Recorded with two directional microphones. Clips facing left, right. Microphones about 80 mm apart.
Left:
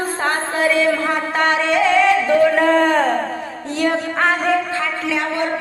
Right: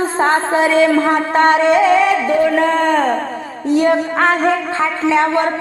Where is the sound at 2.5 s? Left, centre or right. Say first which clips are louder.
Right 1 dB; centre.